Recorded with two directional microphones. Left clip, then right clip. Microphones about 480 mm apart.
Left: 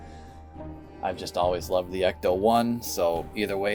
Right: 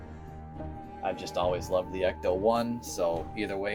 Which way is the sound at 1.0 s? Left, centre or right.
Centre.